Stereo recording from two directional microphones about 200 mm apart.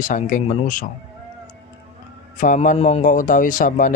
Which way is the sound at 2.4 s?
40° left (ahead or behind).